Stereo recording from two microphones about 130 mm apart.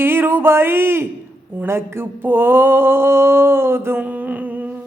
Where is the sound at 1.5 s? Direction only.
15° right (ahead or behind).